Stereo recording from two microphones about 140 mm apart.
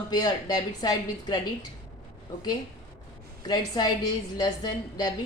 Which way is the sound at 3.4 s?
30° left (ahead or behind).